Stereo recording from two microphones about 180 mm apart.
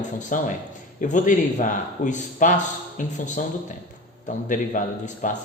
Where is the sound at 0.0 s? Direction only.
45° left (ahead or behind).